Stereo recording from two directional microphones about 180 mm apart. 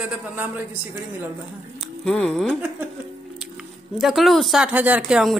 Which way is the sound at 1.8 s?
5° left (ahead or behind).